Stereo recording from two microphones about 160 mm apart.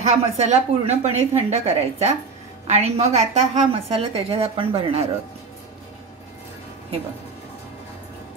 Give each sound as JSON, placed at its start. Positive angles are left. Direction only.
{"t": 0.0, "sound": "a woman's voice", "side_deg": -45}